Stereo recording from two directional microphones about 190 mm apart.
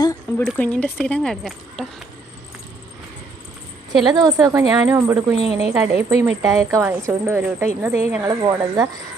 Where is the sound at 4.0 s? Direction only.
20° right (ahead or behind).